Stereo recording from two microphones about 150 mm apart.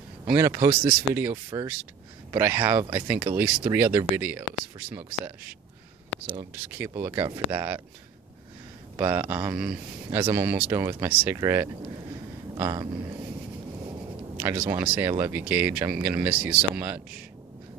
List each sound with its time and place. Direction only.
0.3 s speech: 20° right (ahead or behind)
7.2 s speech: 25° right (ahead or behind)
7.5 s speech: 15° right (ahead or behind)
8.9 s speech: 15° right (ahead or behind)
14.3 s speech: 15° right (ahead or behind)